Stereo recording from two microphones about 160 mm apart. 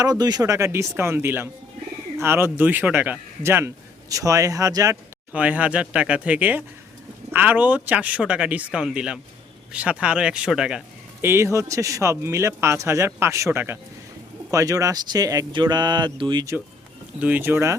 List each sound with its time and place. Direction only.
0.0 s speech: 25° right (ahead or behind)
5.3 s speech: 10° right (ahead or behind)
11.2 s speech: 15° right (ahead or behind)
17.2 s speech: 10° right (ahead or behind)